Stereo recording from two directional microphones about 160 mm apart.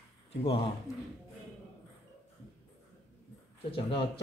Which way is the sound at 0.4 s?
35° left (ahead or behind).